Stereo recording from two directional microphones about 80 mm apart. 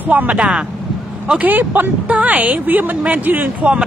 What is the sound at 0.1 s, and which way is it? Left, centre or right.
Speech, centre.